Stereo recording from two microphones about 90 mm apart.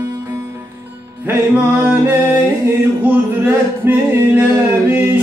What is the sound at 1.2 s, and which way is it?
Music, 15° right (ahead or behind).